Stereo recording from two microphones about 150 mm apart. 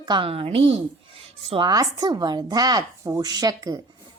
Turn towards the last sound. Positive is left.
turn(degrees=-25)  # may be behind; listen again after turning